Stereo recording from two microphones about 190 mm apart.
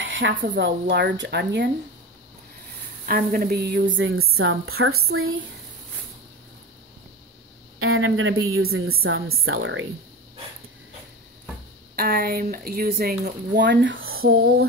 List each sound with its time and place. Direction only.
0.0 s a sound: 90° right
0.6 s speech: 65° right (ahead or behind)
3.1 s a woman's voice: 45° right (ahead or behind); by 5.3 s 90° right
7.8 s a woman's voice: 90° right
11.9 s speech: 50° right (ahead or behind)
13.2 s speech: 65° right (ahead or behind); by 14.2 s 90° right
14.2 s speech: 55° right (ahead or behind)